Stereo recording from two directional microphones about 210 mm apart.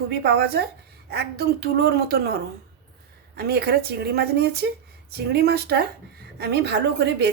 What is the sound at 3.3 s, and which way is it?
A woman's voice, 50° right (ahead or behind).